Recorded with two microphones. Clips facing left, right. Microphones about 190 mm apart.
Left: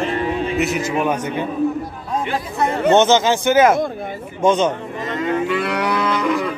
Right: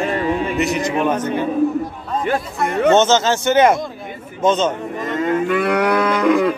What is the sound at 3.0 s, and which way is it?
A man's voice, 15° left (ahead or behind).